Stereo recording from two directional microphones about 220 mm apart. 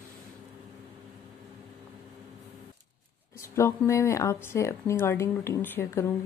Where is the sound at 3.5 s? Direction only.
10° left (ahead or behind).